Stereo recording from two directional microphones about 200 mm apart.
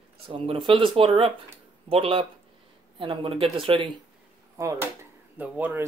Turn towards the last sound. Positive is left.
turn(degrees=-10)  # may be behind; listen again after turning